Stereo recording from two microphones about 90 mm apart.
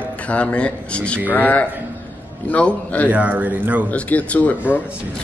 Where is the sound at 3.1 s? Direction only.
15° right (ahead or behind).